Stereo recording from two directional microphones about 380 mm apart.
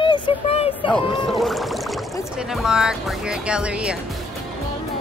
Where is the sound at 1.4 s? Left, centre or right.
Centre.